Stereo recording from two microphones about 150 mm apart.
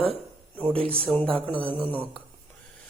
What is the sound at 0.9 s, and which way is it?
Speech, 10° left (ahead or behind).